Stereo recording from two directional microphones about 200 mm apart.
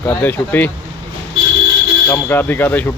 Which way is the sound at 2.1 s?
10° left (ahead or behind).